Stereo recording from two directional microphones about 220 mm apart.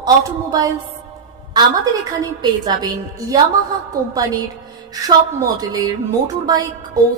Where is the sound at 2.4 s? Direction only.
20° right (ahead or behind).